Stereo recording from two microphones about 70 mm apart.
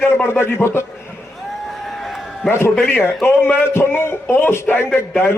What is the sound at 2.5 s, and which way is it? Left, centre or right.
A man's voice, left.